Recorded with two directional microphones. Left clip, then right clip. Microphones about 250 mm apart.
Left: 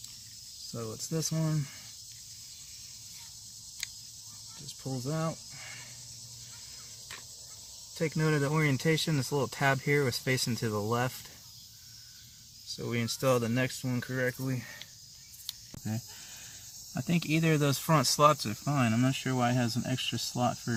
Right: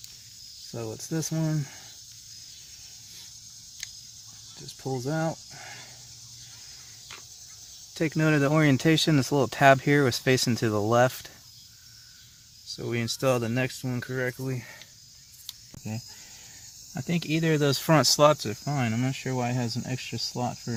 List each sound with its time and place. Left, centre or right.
0.7 s speech: right
4.8 s speech: right
7.9 s speech: right
12.6 s speech: right
15.4 s a sound: centre
16.9 s speech: centre